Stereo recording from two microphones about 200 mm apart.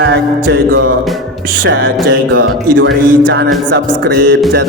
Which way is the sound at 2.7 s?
70° right (ahead or behind).